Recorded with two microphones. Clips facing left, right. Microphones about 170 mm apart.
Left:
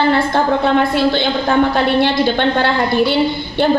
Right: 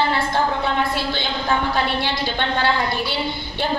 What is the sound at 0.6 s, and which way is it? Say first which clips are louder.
A woman's voice: left 8 dB; 55° left (ahead or behind).